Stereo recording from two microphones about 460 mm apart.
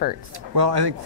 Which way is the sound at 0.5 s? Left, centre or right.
Right.